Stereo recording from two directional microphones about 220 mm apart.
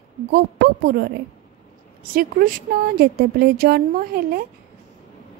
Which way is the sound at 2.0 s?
40° right (ahead or behind).